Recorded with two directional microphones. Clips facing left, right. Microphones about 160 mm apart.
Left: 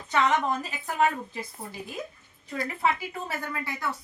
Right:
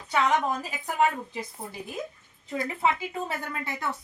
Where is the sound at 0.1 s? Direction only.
10° right (ahead or behind).